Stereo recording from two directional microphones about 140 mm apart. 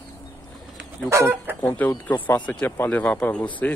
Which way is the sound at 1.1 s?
20° right (ahead or behind).